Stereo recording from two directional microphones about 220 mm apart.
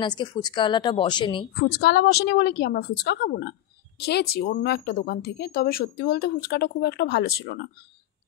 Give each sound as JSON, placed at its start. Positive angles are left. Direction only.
{"t": 0.0, "sound": "a woman's voice", "side_deg": 20}
{"t": 1.6, "sound": "speech", "side_deg": 50}